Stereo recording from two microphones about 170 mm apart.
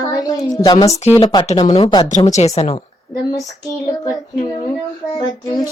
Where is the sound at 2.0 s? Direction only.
45° left (ahead or behind).